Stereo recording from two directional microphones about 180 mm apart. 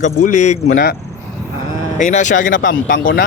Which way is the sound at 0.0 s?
45° left (ahead or behind).